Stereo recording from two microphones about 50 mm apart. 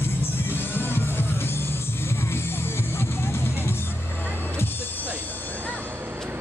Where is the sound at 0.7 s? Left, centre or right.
Left.